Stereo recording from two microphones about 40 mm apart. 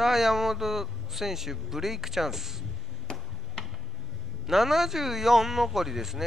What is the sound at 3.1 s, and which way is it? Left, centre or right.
Tick-tock, centre.